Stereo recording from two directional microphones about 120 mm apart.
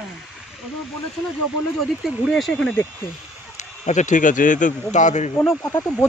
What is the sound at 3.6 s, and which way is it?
Speech, 85° left.